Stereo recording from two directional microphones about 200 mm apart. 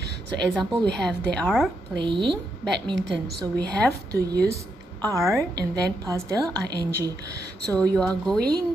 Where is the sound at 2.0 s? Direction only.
25° right (ahead or behind).